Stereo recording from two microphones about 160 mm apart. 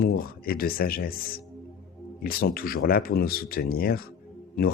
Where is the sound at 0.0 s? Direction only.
70° left (ahead or behind).